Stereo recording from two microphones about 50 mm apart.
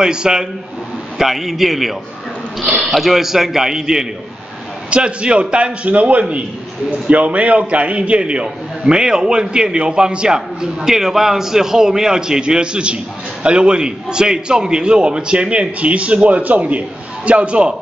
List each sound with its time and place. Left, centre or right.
0.0 s a man's voice: centre
4.9 s a man's voice: right